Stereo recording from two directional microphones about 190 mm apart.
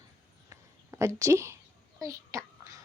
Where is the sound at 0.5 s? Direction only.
15° right (ahead or behind).